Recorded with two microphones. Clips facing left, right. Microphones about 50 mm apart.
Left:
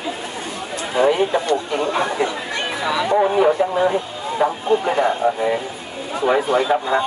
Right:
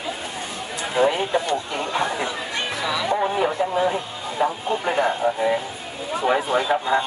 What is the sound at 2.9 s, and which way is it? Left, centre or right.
A man's voice, centre.